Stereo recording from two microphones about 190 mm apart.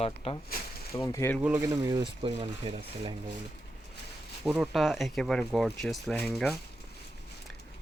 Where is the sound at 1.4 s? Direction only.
10° right (ahead or behind).